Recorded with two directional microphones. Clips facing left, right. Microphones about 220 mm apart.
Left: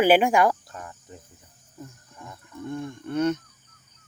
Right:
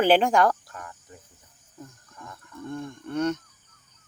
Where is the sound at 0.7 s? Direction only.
25° left (ahead or behind).